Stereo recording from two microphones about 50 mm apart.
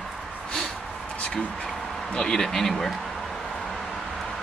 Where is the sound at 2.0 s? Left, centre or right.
Centre.